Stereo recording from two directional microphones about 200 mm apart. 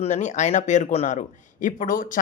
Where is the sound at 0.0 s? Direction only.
35° left (ahead or behind).